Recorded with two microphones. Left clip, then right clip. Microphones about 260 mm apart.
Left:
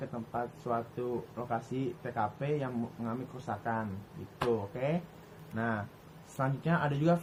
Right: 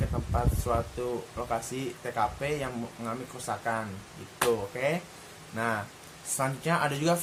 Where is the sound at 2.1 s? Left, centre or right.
Centre.